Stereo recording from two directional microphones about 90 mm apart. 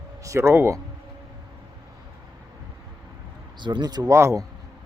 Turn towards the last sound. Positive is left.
turn(degrees=-35)  # may be behind; listen again after turning